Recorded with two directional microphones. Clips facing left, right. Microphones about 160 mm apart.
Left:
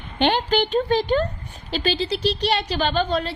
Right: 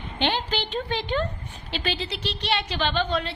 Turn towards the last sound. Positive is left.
turn(degrees=40)  # may be behind; listen again after turning